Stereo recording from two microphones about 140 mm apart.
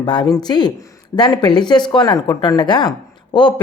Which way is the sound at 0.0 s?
30° left (ahead or behind).